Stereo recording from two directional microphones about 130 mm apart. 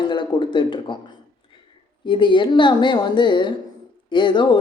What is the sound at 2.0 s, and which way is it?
Speech, 40° left (ahead or behind).